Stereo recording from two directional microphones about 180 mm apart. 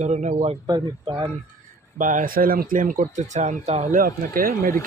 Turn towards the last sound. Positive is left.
turn(degrees=-50)  # may be behind; listen again after turning